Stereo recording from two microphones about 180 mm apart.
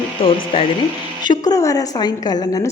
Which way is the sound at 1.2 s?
25° left (ahead or behind).